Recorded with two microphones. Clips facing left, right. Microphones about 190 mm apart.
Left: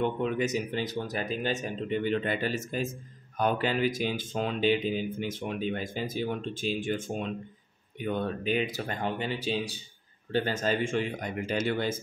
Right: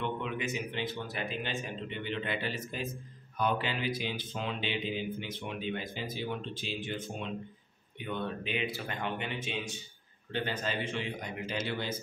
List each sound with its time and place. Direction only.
0.0 s speech: 40° left (ahead or behind)